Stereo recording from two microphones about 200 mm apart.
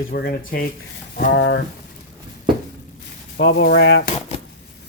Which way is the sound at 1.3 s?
60° left (ahead or behind).